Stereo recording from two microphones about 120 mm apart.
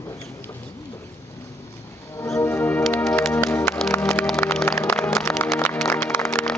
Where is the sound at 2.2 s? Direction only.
20° left (ahead or behind).